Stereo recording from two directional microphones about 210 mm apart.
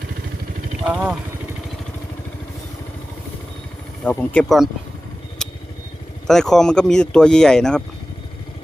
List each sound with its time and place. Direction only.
0.9 s speech: 5° right (ahead or behind)
4.0 s speech: 5° left (ahead or behind)
6.2 s speech: centre (ahead or behind)